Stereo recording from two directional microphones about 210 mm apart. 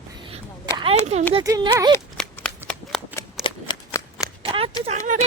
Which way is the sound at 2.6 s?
10° right (ahead or behind).